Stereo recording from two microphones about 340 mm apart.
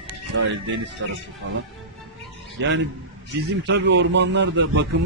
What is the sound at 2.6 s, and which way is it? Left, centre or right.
A man's voice, right.